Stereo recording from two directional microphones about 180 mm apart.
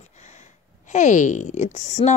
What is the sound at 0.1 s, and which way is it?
Speech, 40° left (ahead or behind).